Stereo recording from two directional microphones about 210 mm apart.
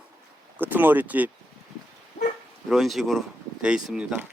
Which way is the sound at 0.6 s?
10° right (ahead or behind).